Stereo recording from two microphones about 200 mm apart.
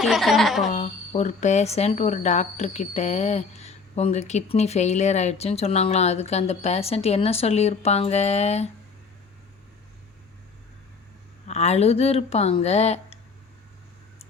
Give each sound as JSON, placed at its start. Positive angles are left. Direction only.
{"t": 0.0, "sound": "speech", "side_deg": 0}
{"t": 0.7, "sound": "speech", "side_deg": 35}
{"t": 11.4, "sound": "speech", "side_deg": 35}